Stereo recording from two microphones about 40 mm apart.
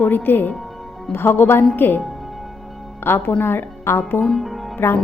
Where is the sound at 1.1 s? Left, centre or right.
Left.